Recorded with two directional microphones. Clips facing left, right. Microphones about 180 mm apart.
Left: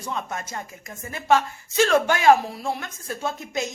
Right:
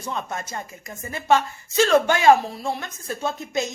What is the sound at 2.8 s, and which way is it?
Speech, 25° right (ahead or behind).